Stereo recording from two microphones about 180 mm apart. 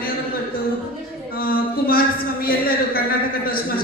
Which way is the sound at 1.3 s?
55° left (ahead or behind).